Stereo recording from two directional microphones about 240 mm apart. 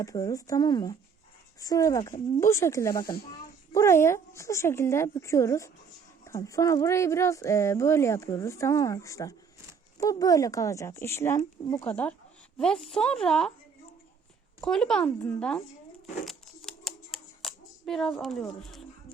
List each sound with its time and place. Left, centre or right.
0.0 s speech: centre
14.6 s speech: centre
16.2 s typewriter: centre